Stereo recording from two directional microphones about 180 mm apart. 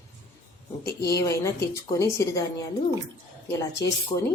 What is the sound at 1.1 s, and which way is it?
Speech, 15° left (ahead or behind).